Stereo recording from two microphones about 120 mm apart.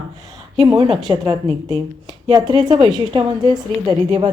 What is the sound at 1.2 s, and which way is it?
A woman's voice, 30° right (ahead or behind).